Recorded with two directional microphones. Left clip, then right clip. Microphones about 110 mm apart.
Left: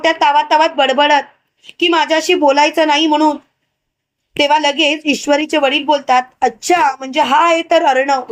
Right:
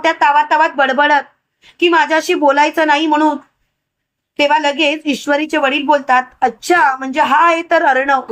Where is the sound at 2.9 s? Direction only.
55° left (ahead or behind).